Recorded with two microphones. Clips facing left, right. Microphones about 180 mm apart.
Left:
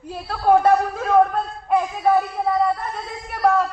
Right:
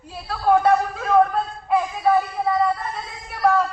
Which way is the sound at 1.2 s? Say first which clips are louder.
Even; centre (ahead or behind).